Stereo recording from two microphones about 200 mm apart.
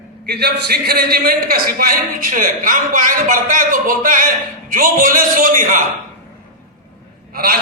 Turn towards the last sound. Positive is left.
turn(degrees=-50)  # may be behind; listen again after turning